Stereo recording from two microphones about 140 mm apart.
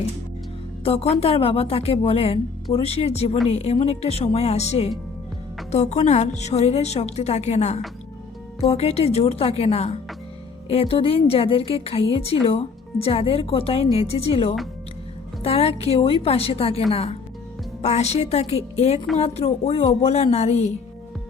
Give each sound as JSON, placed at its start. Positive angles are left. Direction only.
{"t": 0.9, "sound": "a woman's voice", "side_deg": 45}